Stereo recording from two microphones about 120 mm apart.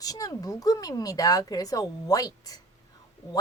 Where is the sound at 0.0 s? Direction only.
30° left (ahead or behind).